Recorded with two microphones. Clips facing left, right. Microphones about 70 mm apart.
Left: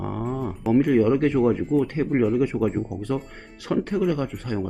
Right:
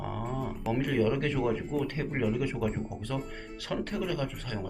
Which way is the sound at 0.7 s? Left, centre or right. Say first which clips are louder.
Left 10 dB; left.